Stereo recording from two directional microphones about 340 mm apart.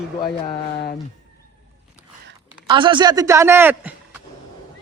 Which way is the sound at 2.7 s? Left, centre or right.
Centre.